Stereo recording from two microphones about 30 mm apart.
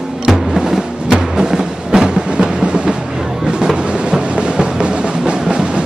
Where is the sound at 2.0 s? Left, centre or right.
Right.